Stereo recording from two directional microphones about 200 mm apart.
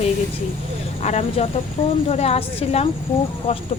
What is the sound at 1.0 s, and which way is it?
Speech, 35° left (ahead or behind).